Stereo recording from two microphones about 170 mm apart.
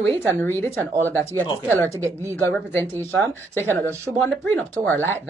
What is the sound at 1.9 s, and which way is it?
Speech, 15° right (ahead or behind).